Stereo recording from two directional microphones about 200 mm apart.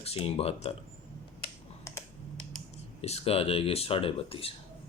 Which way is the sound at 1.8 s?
15° left (ahead or behind).